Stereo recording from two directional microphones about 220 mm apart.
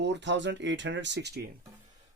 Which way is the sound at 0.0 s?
55° right (ahead or behind).